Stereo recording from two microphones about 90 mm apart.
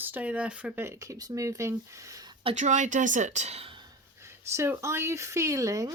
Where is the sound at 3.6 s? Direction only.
65° right (ahead or behind).